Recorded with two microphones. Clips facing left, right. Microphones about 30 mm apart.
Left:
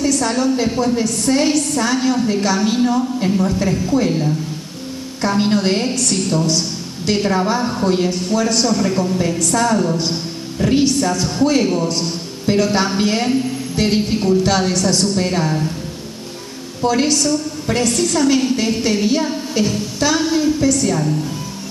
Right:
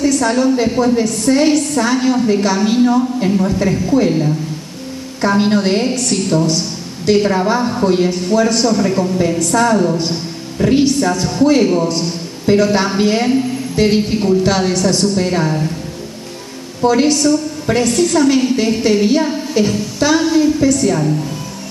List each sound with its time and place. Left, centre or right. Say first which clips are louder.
0.0 s a woman's voice: right 3 dB; centre
16.8 s a woman's voice: right 4 dB; centre